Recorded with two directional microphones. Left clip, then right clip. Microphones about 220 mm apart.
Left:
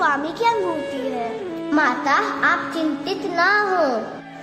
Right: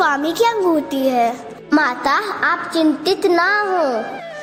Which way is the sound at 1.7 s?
40° right (ahead or behind).